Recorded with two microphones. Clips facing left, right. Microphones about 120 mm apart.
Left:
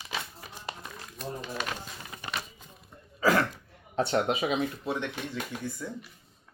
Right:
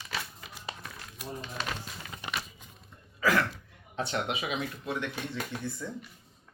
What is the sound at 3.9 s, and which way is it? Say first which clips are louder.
Speech: left 6 dB; 40° left (ahead or behind).